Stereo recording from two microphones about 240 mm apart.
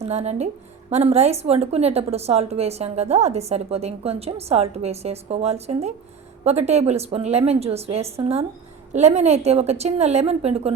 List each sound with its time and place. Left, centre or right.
0.0 s a woman's voice: right